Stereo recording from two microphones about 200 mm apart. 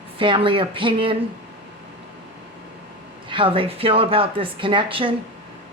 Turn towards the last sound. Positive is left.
turn(degrees=-25)  # may be behind; listen again after turning